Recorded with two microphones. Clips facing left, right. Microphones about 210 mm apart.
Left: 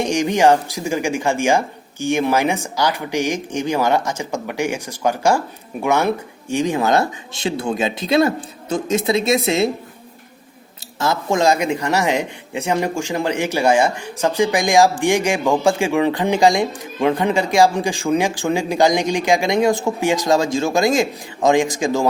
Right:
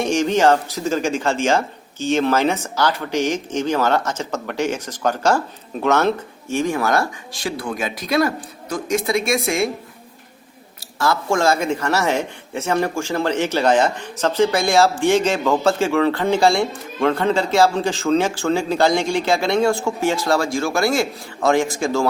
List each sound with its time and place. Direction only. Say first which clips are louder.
0.0 s a man's voice: left 1 dB; 15° left (ahead or behind)
10.9 s a man's voice: even; 20° left (ahead or behind)